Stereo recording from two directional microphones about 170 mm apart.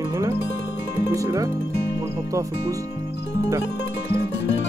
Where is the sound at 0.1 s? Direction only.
20° right (ahead or behind).